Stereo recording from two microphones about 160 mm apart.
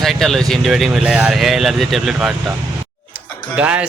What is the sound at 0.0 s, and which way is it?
Speech, centre (ahead or behind).